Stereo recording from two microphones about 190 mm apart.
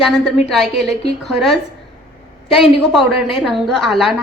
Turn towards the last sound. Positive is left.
turn(degrees=0)  # may be behind; listen again after turning